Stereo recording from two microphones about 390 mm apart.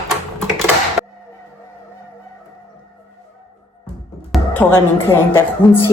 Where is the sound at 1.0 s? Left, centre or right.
Centre.